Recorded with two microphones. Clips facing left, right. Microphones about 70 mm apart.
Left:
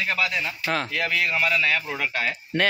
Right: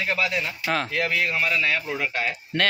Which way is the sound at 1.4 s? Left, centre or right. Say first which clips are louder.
Left 1 dB; centre.